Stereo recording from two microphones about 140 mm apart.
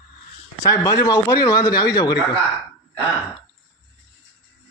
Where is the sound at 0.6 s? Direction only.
25° left (ahead or behind).